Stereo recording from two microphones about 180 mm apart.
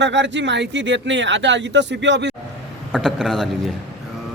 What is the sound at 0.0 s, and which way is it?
Speech, 85° right.